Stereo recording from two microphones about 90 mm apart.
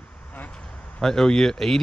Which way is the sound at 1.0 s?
5° left (ahead or behind).